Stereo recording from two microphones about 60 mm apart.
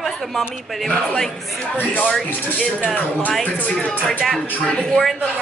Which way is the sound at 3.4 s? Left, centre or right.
Centre.